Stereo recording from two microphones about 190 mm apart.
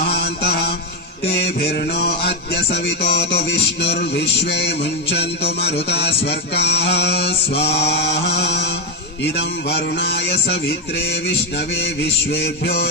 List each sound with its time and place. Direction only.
0.1 s mantra: 60° left (ahead or behind)
12.0 s mantra: 60° left (ahead or behind)